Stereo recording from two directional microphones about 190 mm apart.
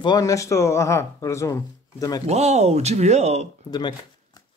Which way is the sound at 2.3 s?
35° right (ahead or behind).